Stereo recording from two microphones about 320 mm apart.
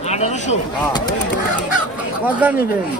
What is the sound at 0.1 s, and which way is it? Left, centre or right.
Speech, left.